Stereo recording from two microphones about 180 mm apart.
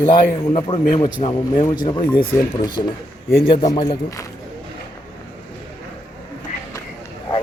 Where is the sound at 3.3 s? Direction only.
55° left (ahead or behind).